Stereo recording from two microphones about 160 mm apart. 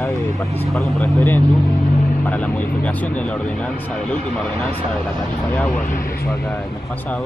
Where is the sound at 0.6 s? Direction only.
Centre (ahead or behind).